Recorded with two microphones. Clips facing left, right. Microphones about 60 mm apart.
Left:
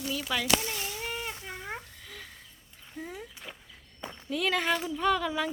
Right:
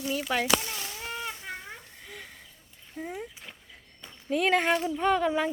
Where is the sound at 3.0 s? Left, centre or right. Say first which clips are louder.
Right 4 dB; centre.